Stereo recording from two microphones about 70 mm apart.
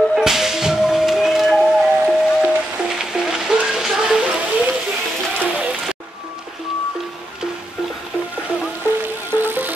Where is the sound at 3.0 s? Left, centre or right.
Centre.